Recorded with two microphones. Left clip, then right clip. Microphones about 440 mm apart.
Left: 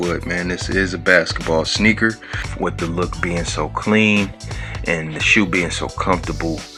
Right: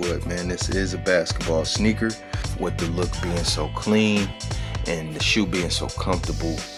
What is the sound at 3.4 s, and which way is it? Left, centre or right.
Speech, right.